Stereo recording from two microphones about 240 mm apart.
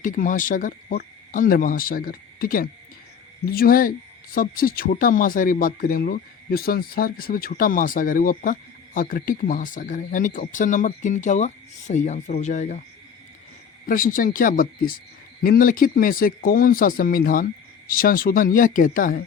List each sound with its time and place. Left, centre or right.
0.0 s speech: left
13.8 s speech: left